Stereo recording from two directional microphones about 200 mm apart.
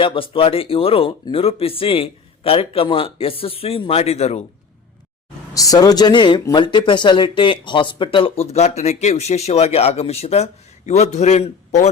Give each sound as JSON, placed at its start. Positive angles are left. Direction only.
{"t": 0.0, "sound": "speech", "side_deg": 25}
{"t": 5.5, "sound": "speech", "side_deg": 20}